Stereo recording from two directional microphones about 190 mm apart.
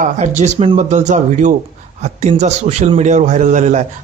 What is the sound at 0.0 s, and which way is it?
Speech, 40° right (ahead or behind).